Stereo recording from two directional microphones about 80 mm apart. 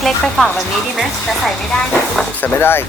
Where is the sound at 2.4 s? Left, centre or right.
Left.